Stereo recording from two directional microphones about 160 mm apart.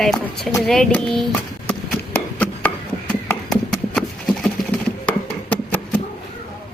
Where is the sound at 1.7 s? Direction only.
10° left (ahead or behind).